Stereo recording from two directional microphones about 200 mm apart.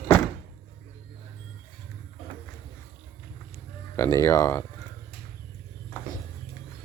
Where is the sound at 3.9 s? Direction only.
15° left (ahead or behind).